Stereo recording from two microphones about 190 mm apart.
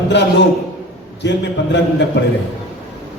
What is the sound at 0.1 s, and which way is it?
Speech, 65° left (ahead or behind).